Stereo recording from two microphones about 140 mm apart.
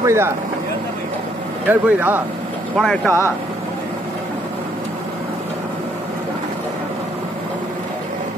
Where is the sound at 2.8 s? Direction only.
5° left (ahead or behind).